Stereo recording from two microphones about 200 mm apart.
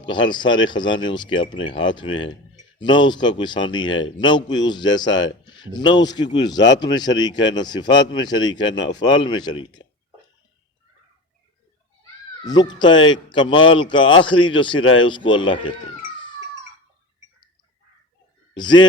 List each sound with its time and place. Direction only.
0.0 s speech: 25° left (ahead or behind)
12.5 s speech: 20° left (ahead or behind)
13.5 s a man's voice: 75° left (ahead or behind)
13.7 s speech: 25° left (ahead or behind)
18.5 s speech: 20° left (ahead or behind)